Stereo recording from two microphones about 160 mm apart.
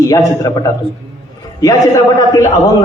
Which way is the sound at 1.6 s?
20° left (ahead or behind).